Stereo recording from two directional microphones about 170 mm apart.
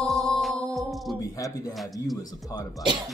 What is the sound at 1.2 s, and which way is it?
Speech, 20° left (ahead or behind).